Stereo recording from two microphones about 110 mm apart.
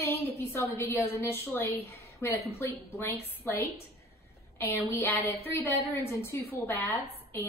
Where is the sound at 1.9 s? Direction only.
20° left (ahead or behind).